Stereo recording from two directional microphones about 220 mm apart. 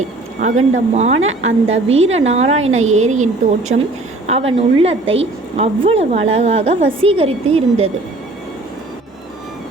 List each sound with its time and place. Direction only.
0.3 s a woman's voice: 35° right (ahead or behind)